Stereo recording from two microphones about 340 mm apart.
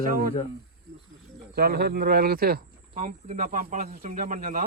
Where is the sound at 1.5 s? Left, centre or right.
Right.